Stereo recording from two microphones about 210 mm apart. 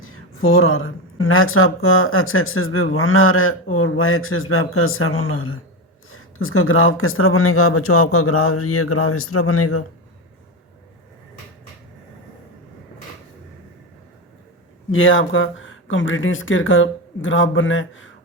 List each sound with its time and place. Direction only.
0.0 s a sound: 75° left (ahead or behind)
1.2 s speech: 75° left (ahead or behind)
14.8 s speech: 70° left (ahead or behind)